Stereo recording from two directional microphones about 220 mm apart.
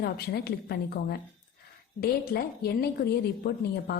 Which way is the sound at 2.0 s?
45° left (ahead or behind).